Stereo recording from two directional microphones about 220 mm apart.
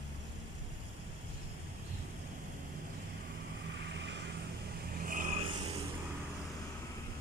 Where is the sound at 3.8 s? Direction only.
50° right (ahead or behind).